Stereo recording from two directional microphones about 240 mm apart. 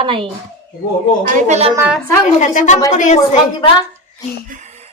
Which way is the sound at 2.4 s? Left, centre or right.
Left.